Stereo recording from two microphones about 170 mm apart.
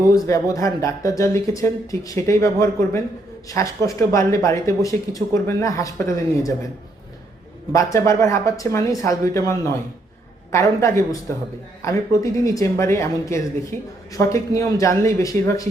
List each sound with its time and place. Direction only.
0.0 s speech: 20° left (ahead or behind)
7.7 s speech: 20° left (ahead or behind)